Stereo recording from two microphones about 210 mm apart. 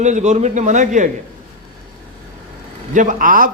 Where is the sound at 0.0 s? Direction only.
35° right (ahead or behind).